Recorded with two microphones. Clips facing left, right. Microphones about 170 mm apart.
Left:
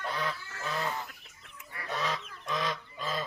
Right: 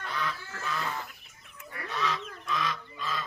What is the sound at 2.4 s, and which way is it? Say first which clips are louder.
Goose: even; 35° left (ahead or behind).